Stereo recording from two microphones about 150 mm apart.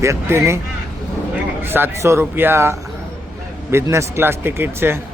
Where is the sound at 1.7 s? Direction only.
15° right (ahead or behind).